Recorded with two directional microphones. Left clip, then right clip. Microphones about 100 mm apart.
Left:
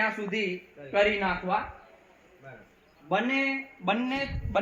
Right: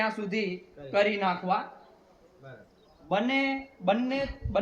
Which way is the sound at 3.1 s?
10° right (ahead or behind).